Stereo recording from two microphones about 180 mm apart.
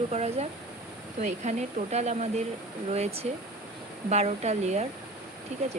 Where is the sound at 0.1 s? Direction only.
35° right (ahead or behind).